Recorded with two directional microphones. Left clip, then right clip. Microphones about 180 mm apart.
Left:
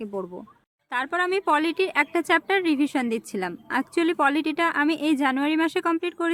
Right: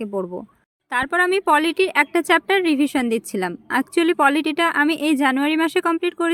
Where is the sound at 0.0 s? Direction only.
25° right (ahead or behind).